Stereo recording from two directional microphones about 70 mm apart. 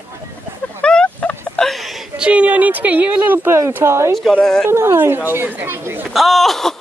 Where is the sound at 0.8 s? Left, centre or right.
Centre.